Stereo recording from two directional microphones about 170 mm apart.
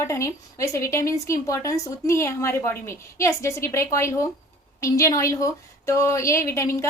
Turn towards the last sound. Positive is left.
turn(degrees=15)  # may be behind; listen again after turning